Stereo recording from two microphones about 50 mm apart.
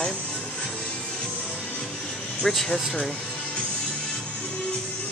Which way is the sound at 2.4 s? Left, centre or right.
Centre.